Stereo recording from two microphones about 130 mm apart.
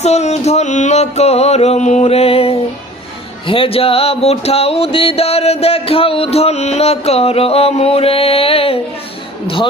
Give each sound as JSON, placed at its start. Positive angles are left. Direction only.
{"t": 0.0, "sound": "music", "side_deg": 55}